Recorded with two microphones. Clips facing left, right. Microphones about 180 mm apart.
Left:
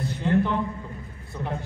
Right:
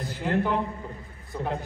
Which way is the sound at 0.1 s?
5° right (ahead or behind).